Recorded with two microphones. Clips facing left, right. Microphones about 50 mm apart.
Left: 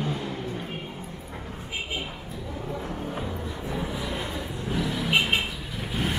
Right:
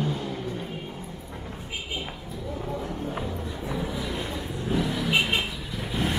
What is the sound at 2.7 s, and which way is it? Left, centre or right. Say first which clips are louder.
Music: even; centre.